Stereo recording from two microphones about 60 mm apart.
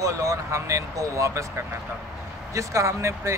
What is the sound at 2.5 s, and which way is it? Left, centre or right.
Speech, right.